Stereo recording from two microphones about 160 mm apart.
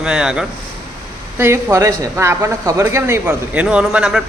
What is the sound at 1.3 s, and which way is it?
A man's voice, 15° right (ahead or behind).